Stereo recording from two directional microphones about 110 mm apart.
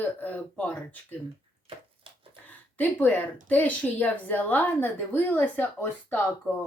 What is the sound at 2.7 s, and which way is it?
Speech, 15° left (ahead or behind).